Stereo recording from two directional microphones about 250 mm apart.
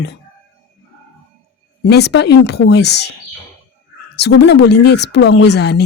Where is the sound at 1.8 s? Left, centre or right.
Left.